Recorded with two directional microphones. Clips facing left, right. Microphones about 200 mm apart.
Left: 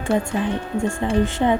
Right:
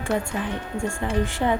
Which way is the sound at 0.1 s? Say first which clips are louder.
Left 5 dB; 25° left (ahead or behind).